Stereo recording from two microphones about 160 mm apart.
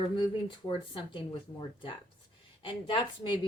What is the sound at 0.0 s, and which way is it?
Speech, 30° left (ahead or behind).